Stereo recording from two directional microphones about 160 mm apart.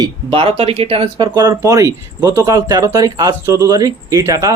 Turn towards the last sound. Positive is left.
turn(degrees=-20)  # may be behind; listen again after turning